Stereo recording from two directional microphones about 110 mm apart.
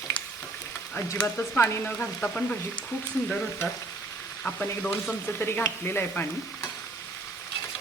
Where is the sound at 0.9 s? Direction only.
25° left (ahead or behind).